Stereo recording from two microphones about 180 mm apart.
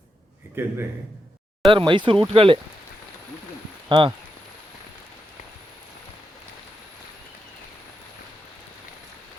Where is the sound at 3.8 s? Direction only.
25° right (ahead or behind).